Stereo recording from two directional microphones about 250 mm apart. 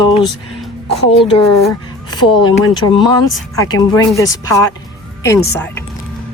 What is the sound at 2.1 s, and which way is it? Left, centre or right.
Speech, centre.